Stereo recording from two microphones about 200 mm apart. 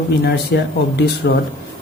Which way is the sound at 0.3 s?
55° left (ahead or behind).